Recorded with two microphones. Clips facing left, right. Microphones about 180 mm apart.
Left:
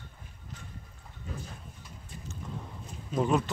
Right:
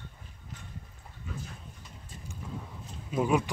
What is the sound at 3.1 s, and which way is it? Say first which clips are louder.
Speech: even; 10° right (ahead or behind).